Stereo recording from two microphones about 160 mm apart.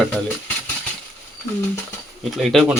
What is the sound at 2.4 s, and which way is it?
Speech, centre (ahead or behind).